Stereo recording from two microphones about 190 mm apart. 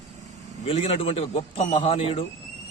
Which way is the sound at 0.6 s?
30° left (ahead or behind).